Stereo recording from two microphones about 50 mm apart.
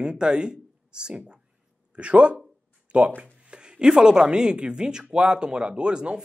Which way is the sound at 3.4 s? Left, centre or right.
Centre.